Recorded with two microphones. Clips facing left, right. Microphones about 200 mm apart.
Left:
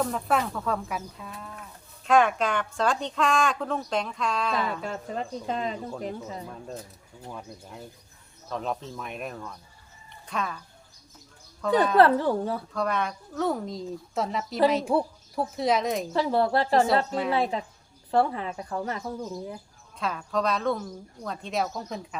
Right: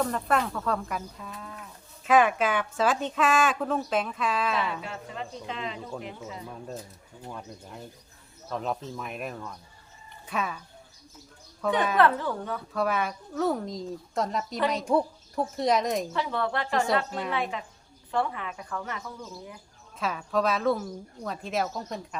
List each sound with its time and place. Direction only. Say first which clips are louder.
0.0 s speech: even; centre (ahead or behind)
4.8 s speech: left 5 dB; 40° left (ahead or behind)
7.3 s speech: even; centre (ahead or behind)
11.6 s speech: left 3 dB; 5° right (ahead or behind)
11.9 s speech: left 6 dB; 35° left (ahead or behind)
12.7 s speech: right 4 dB; 5° right (ahead or behind)
16.1 s speech: left 6 dB; 35° left (ahead or behind)
20.0 s speech: right 1 dB; 5° right (ahead or behind)